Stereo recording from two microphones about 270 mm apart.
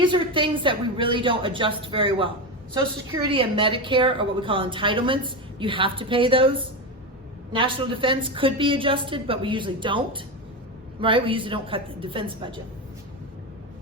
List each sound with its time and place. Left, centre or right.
0.0 s a woman's voice: centre